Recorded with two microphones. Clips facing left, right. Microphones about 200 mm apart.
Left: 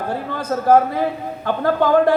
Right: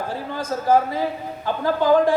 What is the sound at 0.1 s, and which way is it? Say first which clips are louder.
A man's voice: left 3 dB; 65° left (ahead or behind).